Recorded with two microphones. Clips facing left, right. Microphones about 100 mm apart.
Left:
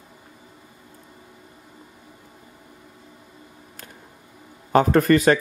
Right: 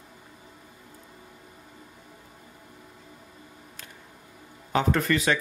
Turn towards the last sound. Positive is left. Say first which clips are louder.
# left 8 dB
turn(degrees=45)  # may be behind; listen again after turning